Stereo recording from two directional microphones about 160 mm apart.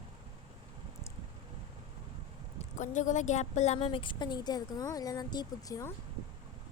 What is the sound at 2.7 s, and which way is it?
A woman's voice, 50° left (ahead or behind).